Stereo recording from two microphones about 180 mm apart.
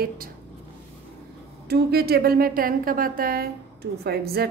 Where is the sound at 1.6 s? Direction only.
60° right (ahead or behind).